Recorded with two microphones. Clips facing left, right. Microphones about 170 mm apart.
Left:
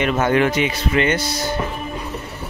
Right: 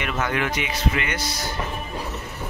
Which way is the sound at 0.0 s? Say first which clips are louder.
Left 8 dB; 30° left (ahead or behind).